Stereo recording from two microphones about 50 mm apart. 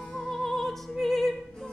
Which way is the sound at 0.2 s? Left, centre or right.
Centre.